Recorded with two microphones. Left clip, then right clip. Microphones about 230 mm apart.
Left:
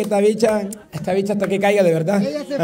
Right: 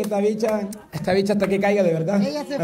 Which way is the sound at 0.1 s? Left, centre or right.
Left.